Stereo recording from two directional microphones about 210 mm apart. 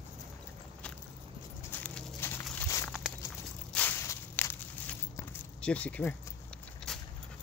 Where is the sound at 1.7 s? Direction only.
5° left (ahead or behind).